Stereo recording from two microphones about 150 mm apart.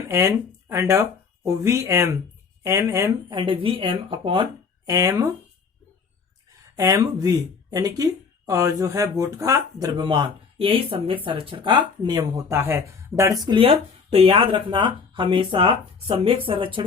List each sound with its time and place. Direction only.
0.1 s speech: 20° right (ahead or behind)
3.3 s speech: 35° right (ahead or behind)
4.9 s speech: 20° right (ahead or behind)
6.7 s speech: 20° right (ahead or behind)